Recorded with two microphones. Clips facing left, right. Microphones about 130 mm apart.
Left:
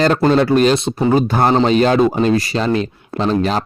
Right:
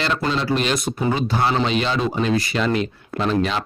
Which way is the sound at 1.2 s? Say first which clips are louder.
Left 6 dB; 50° left (ahead or behind).